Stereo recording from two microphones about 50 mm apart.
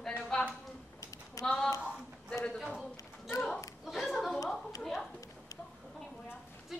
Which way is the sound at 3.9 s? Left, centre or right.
Centre.